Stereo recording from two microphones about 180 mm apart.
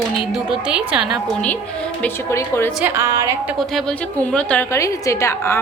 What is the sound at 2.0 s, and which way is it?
Speech, 15° left (ahead or behind).